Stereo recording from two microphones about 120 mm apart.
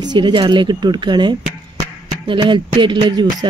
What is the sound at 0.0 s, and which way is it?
Speech, 40° right (ahead or behind).